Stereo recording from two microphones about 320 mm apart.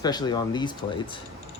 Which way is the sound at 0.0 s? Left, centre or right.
Centre.